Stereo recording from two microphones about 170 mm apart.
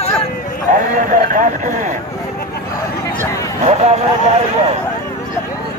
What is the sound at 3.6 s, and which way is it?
Speech, 40° right (ahead or behind).